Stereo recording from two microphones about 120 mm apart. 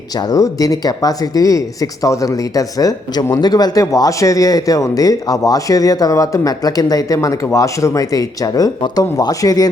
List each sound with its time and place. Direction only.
0.2 s speech: 30° left (ahead or behind)